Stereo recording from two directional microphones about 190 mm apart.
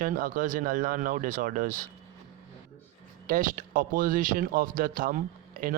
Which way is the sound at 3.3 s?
45° right (ahead or behind).